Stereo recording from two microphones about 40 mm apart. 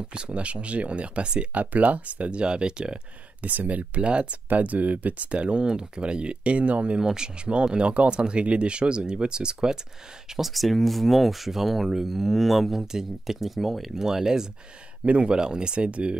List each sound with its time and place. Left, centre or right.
0.1 s speech: right
1.5 s speech: right
3.4 s speech: right
4.5 s speech: right
5.3 s speech: right
7.0 s speech: centre
10.3 s speech: centre
15.0 s speech: right